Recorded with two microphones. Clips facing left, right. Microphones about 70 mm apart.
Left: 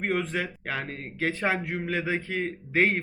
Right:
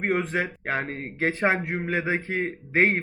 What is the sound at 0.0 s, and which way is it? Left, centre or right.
Speech, right.